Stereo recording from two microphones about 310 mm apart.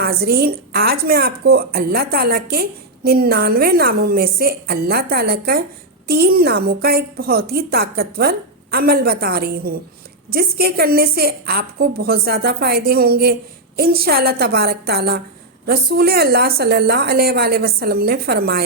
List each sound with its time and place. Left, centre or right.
0.0 s a woman's voice: right